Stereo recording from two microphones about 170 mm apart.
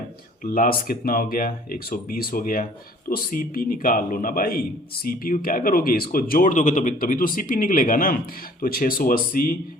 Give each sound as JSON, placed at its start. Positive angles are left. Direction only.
{"t": 0.5, "sound": "speech", "side_deg": 55}